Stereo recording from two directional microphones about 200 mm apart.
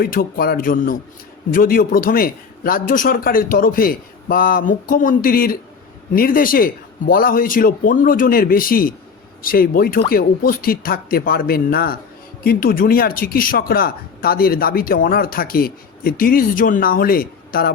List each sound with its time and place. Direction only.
0.0 s speech: 50° left (ahead or behind)